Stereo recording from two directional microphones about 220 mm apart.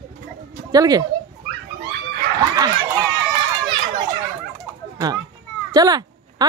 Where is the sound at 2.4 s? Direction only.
15° right (ahead or behind).